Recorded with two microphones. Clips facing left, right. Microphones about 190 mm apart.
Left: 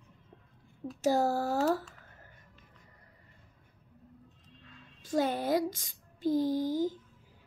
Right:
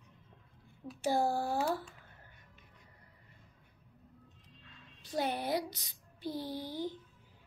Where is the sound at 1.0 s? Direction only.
40° left (ahead or behind).